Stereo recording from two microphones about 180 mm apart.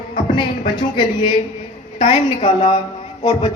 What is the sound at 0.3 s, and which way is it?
Speech, 25° left (ahead or behind).